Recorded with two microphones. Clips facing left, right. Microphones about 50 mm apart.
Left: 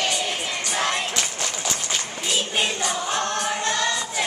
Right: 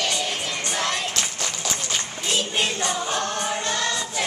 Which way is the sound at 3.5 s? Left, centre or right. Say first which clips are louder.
Left 2 dB; centre.